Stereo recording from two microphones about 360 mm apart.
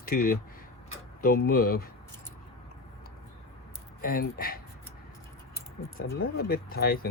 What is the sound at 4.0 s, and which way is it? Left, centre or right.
Speech, left.